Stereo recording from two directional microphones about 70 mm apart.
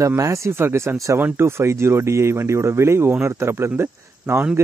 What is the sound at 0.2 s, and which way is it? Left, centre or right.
Speech, right.